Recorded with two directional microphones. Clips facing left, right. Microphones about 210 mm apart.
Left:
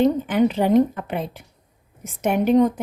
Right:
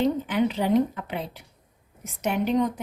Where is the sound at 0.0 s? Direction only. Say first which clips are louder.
Left 5 dB; 50° left (ahead or behind).